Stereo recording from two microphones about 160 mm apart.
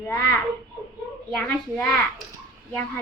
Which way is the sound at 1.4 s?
10° left (ahead or behind).